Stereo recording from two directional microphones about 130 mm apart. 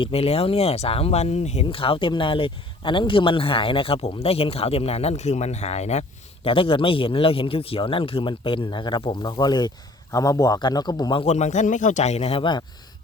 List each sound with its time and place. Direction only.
0.0 s speech: 50° left (ahead or behind)
6.5 s a man's voice: 45° left (ahead or behind)
11.2 s speech: 60° left (ahead or behind); by 12.6 s 40° left (ahead or behind)